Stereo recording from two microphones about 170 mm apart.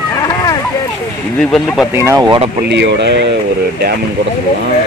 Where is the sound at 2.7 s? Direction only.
90° right.